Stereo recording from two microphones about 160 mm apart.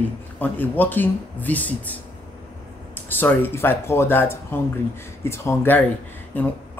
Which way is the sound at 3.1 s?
10° left (ahead or behind).